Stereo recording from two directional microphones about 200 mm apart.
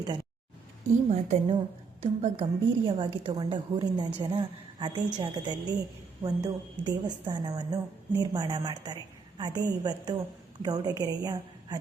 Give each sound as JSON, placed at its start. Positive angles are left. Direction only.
{"t": 1.1, "sound": "a woman's voice", "side_deg": -30}